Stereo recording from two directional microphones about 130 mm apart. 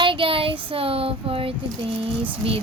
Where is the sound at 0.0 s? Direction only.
40° right (ahead or behind).